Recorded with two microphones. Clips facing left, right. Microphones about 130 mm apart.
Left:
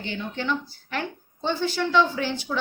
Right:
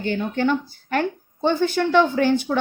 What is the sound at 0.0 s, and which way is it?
A woman's voice, 50° right (ahead or behind).